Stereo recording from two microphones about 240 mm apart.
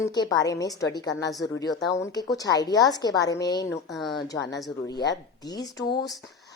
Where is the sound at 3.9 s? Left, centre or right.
Centre.